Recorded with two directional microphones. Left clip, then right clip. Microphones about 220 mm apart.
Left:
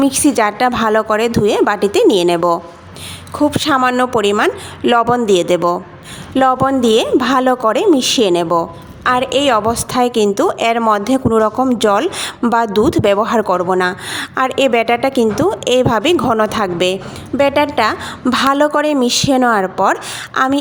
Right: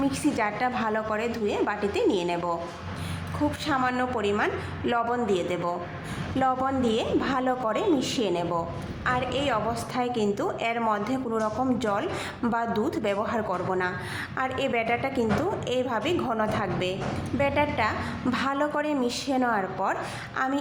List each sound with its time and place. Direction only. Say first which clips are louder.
0.0 s a woman's voice: left 13 dB; 50° left (ahead or behind)